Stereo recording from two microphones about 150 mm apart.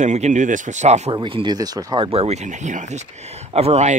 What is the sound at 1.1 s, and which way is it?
Speech, 30° right (ahead or behind).